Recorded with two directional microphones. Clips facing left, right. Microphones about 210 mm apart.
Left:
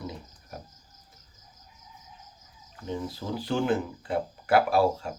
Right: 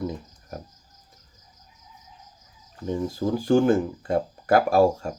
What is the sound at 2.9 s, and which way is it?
Speech, 45° right (ahead or behind).